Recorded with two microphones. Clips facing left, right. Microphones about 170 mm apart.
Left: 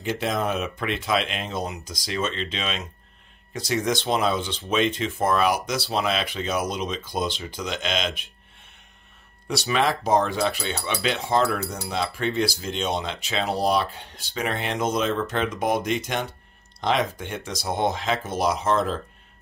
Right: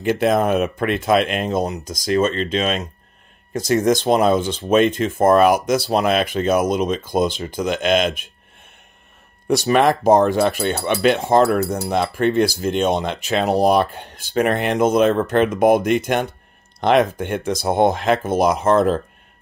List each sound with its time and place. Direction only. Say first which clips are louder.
0.0 s speech: right 9 dB; 55° right (ahead or behind)
9.5 s speech: right 8 dB; 50° right (ahead or behind)